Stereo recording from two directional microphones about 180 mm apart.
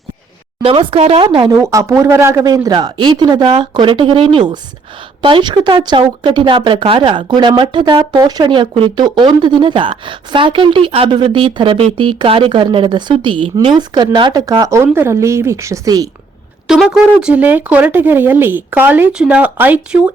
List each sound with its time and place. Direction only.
0.6 s speech: 30° right (ahead or behind)
1.5 s speech: 15° right (ahead or behind)
16.6 s speech: centre (ahead or behind)